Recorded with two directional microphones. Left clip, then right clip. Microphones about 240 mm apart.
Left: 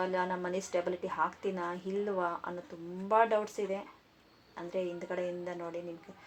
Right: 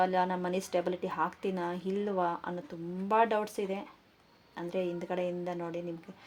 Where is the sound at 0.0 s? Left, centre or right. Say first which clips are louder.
Right 4 dB; right.